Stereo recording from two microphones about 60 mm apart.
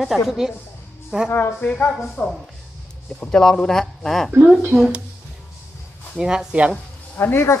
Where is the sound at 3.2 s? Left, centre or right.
Centre.